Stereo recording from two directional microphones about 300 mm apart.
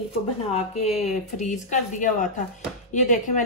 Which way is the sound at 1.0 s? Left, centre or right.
Left.